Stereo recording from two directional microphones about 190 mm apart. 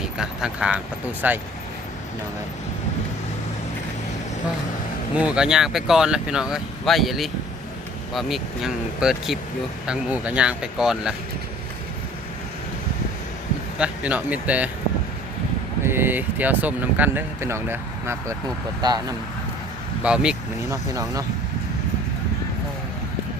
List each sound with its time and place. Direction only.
0.2 s speech: 5° right (ahead or behind)
5.1 s speech: 5° right (ahead or behind)
13.7 s speech: 5° right (ahead or behind)
15.8 s speech: 10° right (ahead or behind)
20.0 s speech: 5° right (ahead or behind)
20.7 s speech: 15° right (ahead or behind)